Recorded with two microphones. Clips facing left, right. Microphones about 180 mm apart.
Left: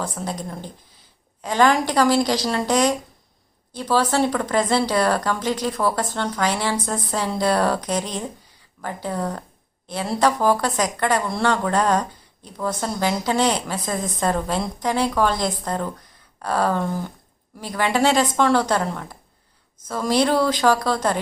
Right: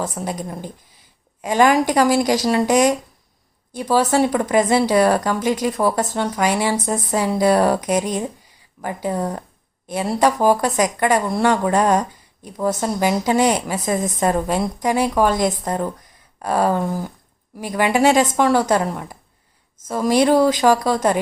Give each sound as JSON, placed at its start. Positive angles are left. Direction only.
{"t": 0.2, "sound": "a woman's voice", "side_deg": -20}
{"t": 1.4, "sound": "a woman's voice", "side_deg": -10}